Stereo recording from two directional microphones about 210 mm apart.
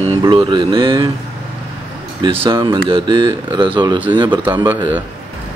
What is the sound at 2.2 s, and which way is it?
Speech, 25° right (ahead or behind).